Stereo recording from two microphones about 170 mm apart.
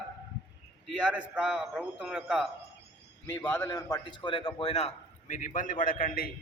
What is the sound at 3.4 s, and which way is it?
Speech, 10° left (ahead or behind).